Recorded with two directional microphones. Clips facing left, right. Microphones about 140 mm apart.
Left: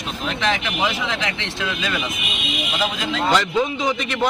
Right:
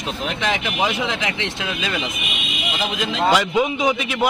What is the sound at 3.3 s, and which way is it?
Speech, 15° right (ahead or behind).